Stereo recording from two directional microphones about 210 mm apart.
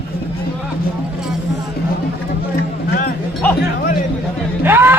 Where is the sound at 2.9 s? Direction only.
45° left (ahead or behind).